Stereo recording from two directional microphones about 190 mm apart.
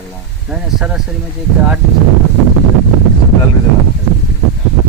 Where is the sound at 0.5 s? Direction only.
Centre (ahead or behind).